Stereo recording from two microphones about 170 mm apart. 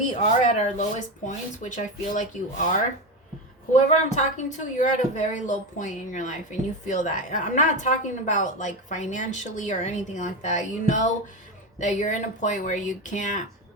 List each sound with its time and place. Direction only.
0.1 s speech: 45° left (ahead or behind)
3.7 s speech: 45° left (ahead or behind)